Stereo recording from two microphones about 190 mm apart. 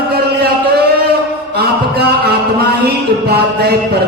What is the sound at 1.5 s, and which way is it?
Music, 55° right (ahead or behind).